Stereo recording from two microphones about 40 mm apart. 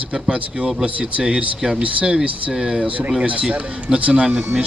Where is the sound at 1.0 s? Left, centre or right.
Centre.